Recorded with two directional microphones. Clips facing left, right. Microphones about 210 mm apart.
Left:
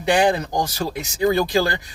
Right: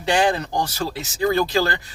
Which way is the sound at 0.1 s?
15° left (ahead or behind).